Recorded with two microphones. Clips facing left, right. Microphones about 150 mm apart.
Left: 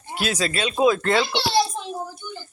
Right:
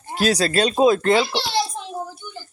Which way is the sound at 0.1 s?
40° right (ahead or behind).